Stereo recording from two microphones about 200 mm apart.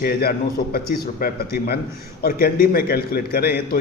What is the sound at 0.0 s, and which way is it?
A man's voice, 50° left (ahead or behind).